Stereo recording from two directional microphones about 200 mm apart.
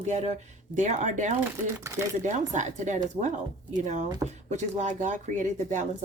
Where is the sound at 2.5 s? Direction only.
35° right (ahead or behind).